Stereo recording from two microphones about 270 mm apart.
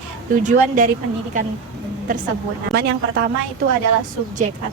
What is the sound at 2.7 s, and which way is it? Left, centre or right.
Speech, right.